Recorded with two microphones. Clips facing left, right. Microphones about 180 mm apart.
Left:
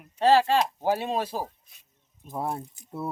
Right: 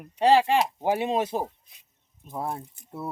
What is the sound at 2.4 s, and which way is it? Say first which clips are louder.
Speech: left 1 dB; centre (ahead or behind).